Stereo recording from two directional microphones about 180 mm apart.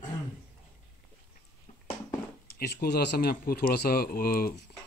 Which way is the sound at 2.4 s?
60° left (ahead or behind).